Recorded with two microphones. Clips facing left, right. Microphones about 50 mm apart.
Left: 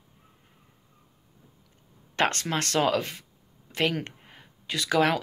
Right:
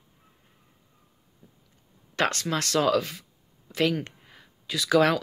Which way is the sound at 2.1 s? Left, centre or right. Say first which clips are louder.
Even; left.